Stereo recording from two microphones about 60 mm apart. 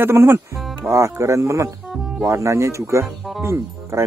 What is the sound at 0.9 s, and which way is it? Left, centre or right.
Speech, right.